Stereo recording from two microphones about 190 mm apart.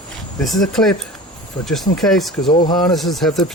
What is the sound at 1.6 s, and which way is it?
Speech, 20° left (ahead or behind).